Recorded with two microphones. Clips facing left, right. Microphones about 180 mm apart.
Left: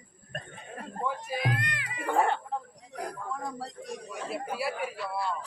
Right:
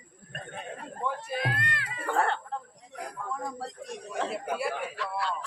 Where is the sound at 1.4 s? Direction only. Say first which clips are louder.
Even; 15° left (ahead or behind).